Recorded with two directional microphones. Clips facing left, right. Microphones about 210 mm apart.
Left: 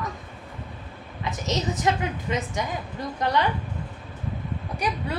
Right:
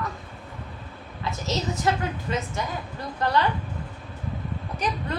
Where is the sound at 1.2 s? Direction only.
20° left (ahead or behind).